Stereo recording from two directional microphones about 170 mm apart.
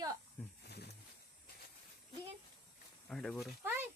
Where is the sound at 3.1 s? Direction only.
5° left (ahead or behind).